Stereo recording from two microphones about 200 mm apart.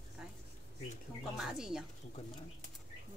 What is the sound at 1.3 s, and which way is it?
Speech, 5° right (ahead or behind).